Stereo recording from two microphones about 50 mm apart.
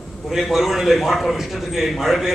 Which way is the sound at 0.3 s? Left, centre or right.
Centre.